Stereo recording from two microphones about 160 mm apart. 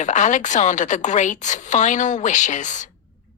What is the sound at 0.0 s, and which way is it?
Speech, 50° left (ahead or behind).